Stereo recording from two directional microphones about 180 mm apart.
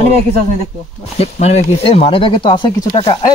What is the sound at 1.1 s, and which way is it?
Speech, 35° left (ahead or behind).